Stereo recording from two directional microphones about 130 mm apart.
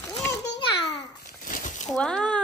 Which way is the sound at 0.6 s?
40° left (ahead or behind).